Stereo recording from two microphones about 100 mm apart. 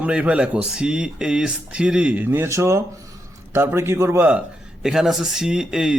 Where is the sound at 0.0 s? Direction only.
10° right (ahead or behind).